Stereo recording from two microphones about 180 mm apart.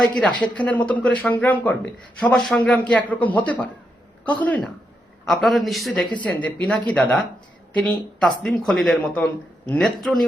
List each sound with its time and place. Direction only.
0.0 s speech: 5° left (ahead or behind)